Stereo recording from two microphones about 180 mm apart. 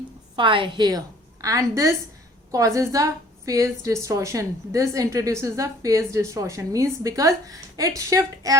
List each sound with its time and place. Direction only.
0.3 s a woman's voice: 25° right (ahead or behind)